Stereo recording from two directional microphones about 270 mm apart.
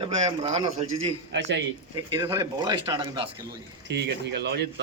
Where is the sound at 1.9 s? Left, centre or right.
Centre.